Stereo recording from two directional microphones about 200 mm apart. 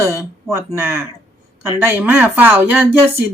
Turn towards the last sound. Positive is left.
turn(degrees=-10)  # may be behind; listen again after turning